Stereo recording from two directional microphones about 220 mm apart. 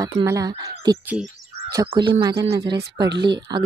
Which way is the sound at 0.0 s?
15° right (ahead or behind).